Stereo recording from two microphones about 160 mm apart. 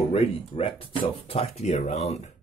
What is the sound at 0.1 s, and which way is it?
Speech, 35° left (ahead or behind).